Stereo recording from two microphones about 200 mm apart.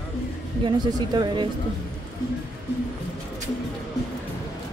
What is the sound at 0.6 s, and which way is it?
Speech, 20° right (ahead or behind).